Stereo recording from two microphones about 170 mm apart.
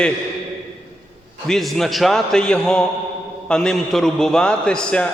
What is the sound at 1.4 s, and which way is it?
A man's voice, centre (ahead or behind).